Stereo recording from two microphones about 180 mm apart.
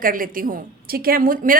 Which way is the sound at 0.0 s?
50° right (ahead or behind).